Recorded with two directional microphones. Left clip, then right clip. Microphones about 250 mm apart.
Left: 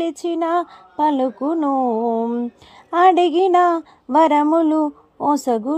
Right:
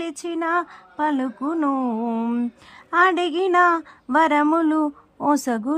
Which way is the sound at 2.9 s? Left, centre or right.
Centre.